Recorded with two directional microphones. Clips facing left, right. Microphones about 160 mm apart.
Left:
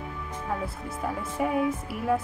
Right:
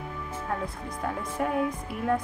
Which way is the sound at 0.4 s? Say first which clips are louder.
Left 1 dB; 5° left (ahead or behind).